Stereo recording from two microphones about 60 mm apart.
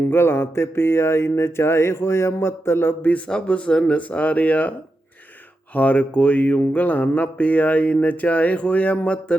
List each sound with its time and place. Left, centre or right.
0.0 s mantra: left
3.0 s speech: left
5.7 s speech: left